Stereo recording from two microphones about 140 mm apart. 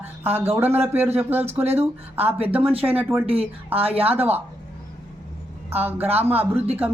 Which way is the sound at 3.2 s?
40° right (ahead or behind).